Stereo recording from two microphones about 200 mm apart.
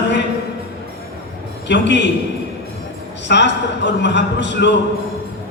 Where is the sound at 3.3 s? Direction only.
60° left (ahead or behind).